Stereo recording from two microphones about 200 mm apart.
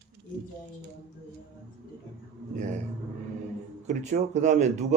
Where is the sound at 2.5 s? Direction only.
35° right (ahead or behind).